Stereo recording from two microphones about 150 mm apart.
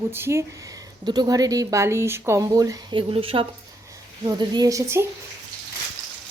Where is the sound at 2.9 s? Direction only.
35° right (ahead or behind).